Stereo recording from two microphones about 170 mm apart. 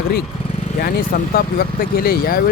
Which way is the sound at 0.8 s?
60° left (ahead or behind).